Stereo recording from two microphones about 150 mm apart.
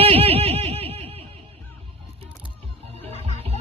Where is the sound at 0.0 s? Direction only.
40° right (ahead or behind).